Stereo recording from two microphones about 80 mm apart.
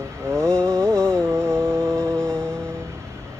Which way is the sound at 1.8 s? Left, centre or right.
Centre.